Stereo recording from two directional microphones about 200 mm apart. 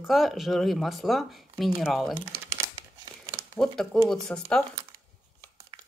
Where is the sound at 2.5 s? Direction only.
15° right (ahead or behind).